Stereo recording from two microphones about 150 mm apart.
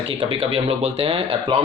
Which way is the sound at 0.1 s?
40° right (ahead or behind).